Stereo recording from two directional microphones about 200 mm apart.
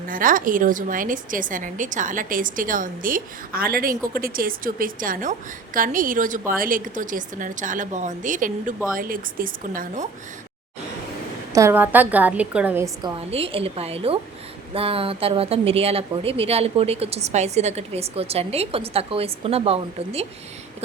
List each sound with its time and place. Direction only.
0.1 s a woman's voice: 45° right (ahead or behind)
11.5 s a woman's voice: 10° right (ahead or behind)
13.0 s speech: 30° right (ahead or behind)